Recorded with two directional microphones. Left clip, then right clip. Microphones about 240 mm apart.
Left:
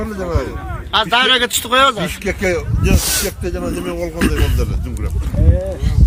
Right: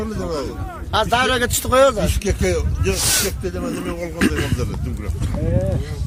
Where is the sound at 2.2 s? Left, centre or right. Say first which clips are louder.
Left 6 dB; left.